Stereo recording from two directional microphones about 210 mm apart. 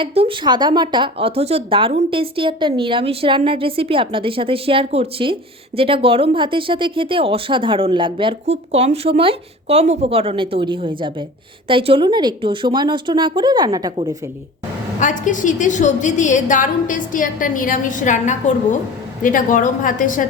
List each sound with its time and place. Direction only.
0.0 s a woman's voice: 25° right (ahead or behind)
14.9 s a woman's voice: 35° left (ahead or behind)